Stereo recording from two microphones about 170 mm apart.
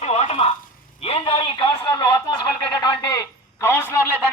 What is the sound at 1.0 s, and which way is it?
A man's voice, 35° left (ahead or behind).